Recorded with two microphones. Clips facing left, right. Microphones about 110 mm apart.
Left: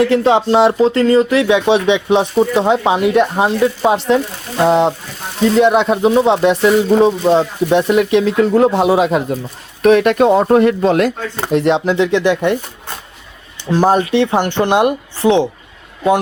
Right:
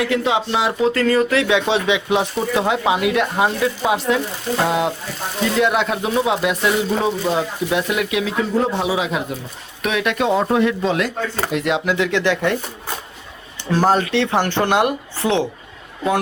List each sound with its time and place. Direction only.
0.0 s speech: 35° left (ahead or behind)
5.5 s speech: 20° left (ahead or behind); by 8.3 s 35° left (ahead or behind)
8.4 s speech: 65° left (ahead or behind)
11.3 s speech: 30° left (ahead or behind)
12.1 s speech: 15° left (ahead or behind)
13.7 s speech: 15° left (ahead or behind)